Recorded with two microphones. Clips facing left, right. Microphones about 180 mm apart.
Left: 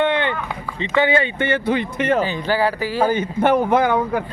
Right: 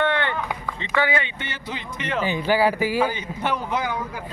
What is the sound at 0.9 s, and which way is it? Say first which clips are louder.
Speech: left 5 dB; 25° left (ahead or behind).